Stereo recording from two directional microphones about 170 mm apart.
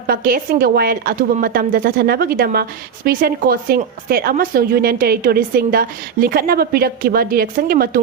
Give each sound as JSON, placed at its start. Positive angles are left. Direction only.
{"t": 0.1, "sound": "a woman's voice", "side_deg": -60}